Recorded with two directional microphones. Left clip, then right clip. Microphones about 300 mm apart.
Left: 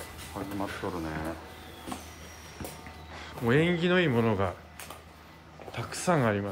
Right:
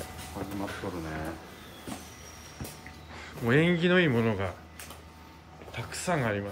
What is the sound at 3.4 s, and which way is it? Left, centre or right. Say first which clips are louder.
Speech: right 1 dB; centre.